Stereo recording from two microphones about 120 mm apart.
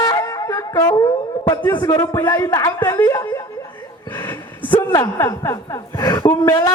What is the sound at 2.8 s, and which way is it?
Speech, 15° left (ahead or behind).